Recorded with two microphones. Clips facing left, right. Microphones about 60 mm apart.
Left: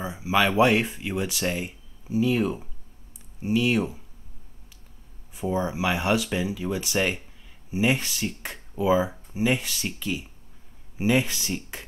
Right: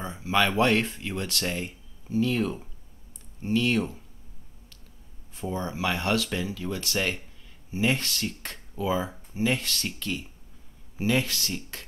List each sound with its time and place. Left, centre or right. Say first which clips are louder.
0.0 s speech: left 2 dB; centre
5.3 s speech: left 5 dB; centre